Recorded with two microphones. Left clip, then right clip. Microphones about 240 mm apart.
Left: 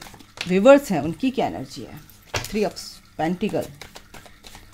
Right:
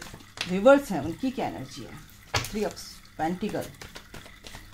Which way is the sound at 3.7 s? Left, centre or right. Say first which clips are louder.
Left 2 dB; centre.